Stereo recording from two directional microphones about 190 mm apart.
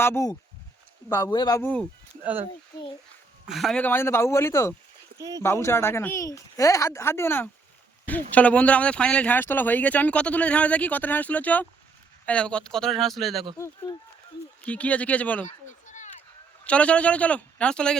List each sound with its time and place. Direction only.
0.0 s speech: 15° left (ahead or behind)
3.4 s speech: centre (ahead or behind)
5.1 s speech: 20° right (ahead or behind)
5.4 s speech: 15° left (ahead or behind)
14.6 s speech: 5° left (ahead or behind)
16.6 s speech: 5° left (ahead or behind)